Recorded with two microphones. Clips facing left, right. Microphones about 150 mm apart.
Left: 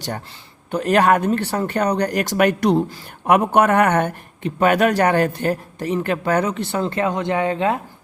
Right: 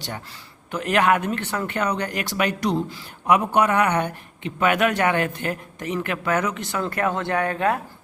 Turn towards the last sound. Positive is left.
turn(degrees=20)  # may be behind; listen again after turning